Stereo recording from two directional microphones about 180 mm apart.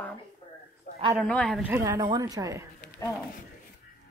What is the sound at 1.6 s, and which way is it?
Speech, 15° right (ahead or behind).